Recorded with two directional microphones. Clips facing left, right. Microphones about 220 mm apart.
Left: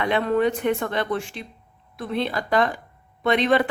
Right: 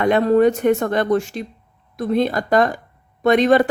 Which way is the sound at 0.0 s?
45° right (ahead or behind).